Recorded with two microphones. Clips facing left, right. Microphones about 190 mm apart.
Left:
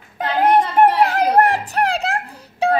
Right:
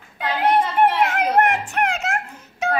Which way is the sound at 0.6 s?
40° left (ahead or behind).